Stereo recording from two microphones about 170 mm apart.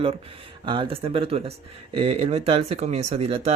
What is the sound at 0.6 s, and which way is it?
Speech, 30° right (ahead or behind).